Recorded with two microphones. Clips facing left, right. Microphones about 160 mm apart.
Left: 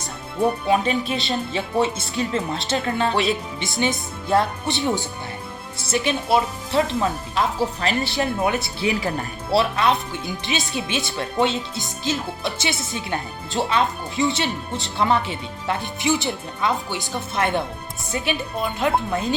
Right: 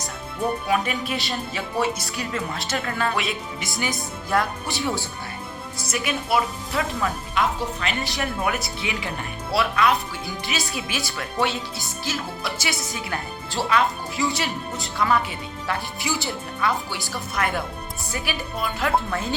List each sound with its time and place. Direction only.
0.7 s speech: 25° left (ahead or behind)
8.1 s speech: 25° left (ahead or behind)
8.8 s speech: 40° left (ahead or behind); by 19.4 s 20° left (ahead or behind)